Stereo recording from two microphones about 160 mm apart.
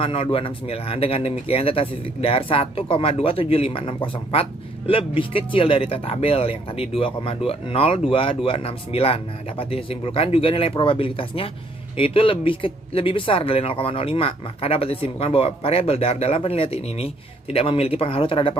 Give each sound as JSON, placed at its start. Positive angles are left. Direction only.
{"t": 0.0, "sound": "speech", "side_deg": 35}